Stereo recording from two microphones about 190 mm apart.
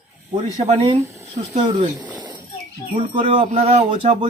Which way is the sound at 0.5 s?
30° right (ahead or behind).